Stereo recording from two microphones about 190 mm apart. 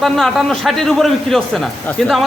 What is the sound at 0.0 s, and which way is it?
Speech, centre (ahead or behind).